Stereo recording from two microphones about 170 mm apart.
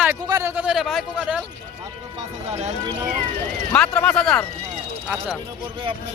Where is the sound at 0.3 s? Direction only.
15° right (ahead or behind).